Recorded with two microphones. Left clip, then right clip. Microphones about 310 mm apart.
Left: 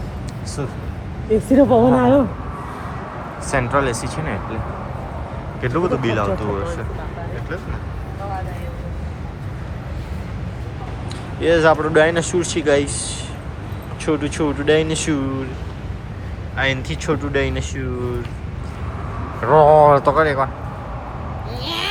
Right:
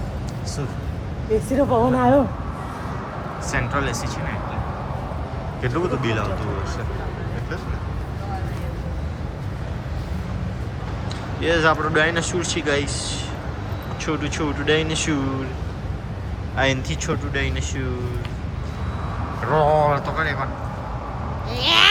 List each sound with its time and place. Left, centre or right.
1.5 s speech: left
3.4 s speech: centre
5.6 s speech: centre
11.3 s speech: centre
16.6 s speech: centre
19.4 s speech: centre
21.5 s a sound: centre